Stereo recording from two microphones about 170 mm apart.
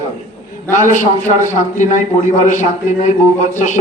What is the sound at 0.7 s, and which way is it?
A man's voice, 45° left (ahead or behind).